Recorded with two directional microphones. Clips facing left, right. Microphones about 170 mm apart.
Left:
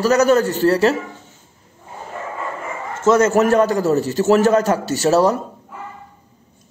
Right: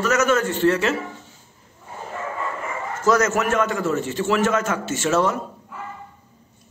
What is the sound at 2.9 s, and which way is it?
A man's voice, 25° left (ahead or behind).